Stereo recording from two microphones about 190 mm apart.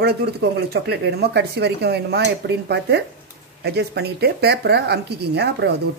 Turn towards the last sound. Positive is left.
turn(degrees=-60)  # may be behind; listen again after turning